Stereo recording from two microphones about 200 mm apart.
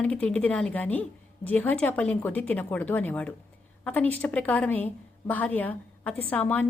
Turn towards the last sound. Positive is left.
turn(degrees=5)  # may be behind; listen again after turning